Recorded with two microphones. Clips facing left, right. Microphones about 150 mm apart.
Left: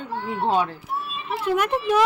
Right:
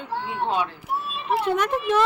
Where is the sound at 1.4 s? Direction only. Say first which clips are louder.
Left 3 dB; 10° left (ahead or behind).